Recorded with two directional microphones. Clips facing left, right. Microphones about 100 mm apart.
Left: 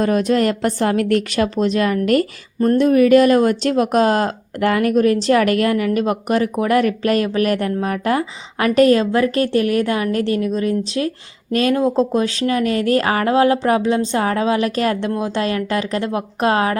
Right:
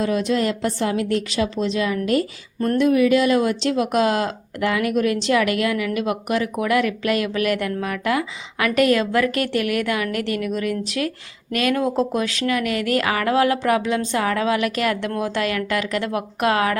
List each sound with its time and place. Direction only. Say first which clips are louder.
0.0 s a woman's voice: left 4 dB; 50° left (ahead or behind)
2.6 s a woman's voice: left 4 dB; 35° left (ahead or behind)